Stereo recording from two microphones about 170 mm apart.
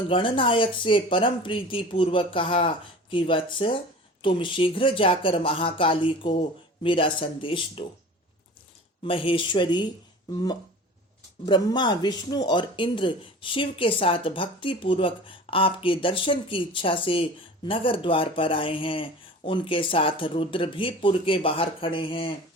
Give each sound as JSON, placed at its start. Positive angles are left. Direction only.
{"t": 0.1, "sound": "speech", "side_deg": 30}
{"t": 9.0, "sound": "speech", "side_deg": 30}